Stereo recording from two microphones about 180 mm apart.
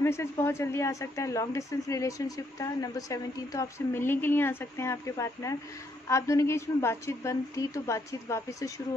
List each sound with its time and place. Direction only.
0.0 s speech: 15° left (ahead or behind)